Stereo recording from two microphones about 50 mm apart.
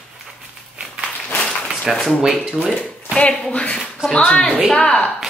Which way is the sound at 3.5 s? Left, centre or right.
Centre.